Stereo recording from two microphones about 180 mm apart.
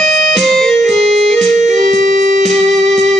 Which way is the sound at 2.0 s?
45° right (ahead or behind).